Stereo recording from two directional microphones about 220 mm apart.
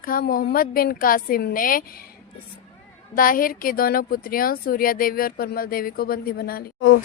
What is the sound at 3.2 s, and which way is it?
Speech, 40° left (ahead or behind).